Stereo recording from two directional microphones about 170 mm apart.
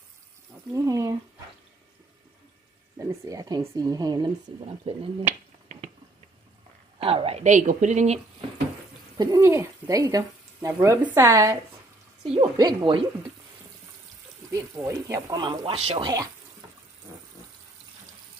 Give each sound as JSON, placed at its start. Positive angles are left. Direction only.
{"t": 0.7, "sound": "a sound", "side_deg": -20}
{"t": 3.1, "sound": "speech", "side_deg": -20}
{"t": 4.6, "sound": "a woman's voice", "side_deg": -35}
{"t": 7.0, "sound": "a woman's voice", "side_deg": -35}
{"t": 9.2, "sound": "speech", "side_deg": -20}
{"t": 14.5, "sound": "speech", "side_deg": -15}